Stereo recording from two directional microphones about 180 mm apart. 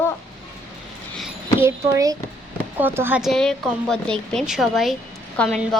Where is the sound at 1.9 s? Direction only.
20° right (ahead or behind).